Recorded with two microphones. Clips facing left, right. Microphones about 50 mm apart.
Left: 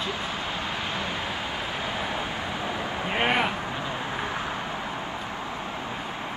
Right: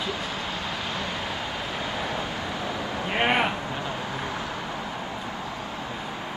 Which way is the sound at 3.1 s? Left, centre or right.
Centre.